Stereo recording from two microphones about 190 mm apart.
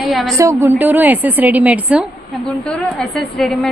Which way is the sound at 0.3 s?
15° right (ahead or behind).